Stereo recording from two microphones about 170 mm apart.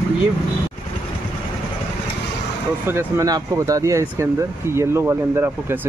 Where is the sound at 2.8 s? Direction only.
15° right (ahead or behind).